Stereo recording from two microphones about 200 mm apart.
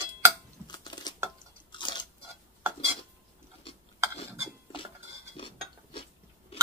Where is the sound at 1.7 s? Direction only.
25° left (ahead or behind).